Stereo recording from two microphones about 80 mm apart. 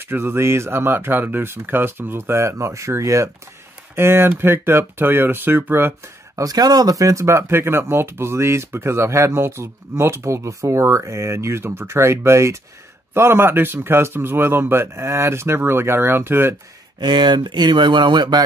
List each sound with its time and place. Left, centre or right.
0.0 s a man's voice: right
6.3 s a man's voice: right
17.0 s speech: right